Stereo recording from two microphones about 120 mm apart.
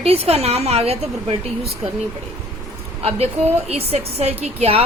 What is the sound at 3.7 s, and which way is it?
Speech, 60° right (ahead or behind).